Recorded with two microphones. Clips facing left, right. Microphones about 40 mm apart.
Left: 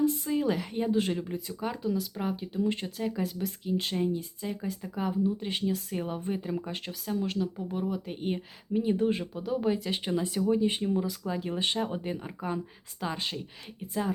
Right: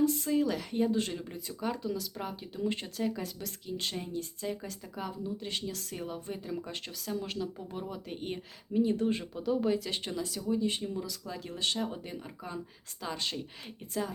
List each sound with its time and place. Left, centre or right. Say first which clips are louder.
0.0 s speech: left 1 dB; centre
3.1 s speech: left 5 dB; centre
6.7 s speech: left 3 dB; centre
10.1 s speech: left 7 dB; left